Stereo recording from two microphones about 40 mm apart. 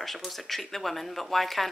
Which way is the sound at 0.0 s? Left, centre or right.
Centre.